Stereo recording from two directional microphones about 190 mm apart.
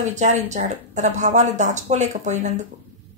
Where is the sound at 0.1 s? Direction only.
40° right (ahead or behind).